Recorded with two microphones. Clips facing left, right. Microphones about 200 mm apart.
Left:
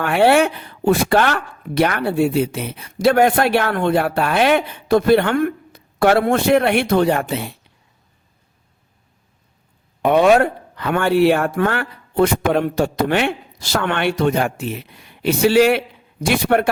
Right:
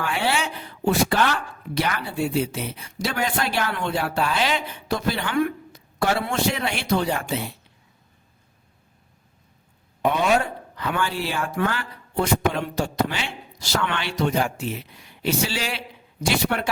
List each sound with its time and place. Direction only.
0.0 s speech: 60° left (ahead or behind)
10.0 s speech: 60° left (ahead or behind)